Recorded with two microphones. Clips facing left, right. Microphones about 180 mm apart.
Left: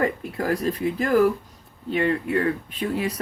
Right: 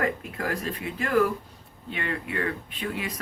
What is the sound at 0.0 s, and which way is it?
Speech, 35° left (ahead or behind).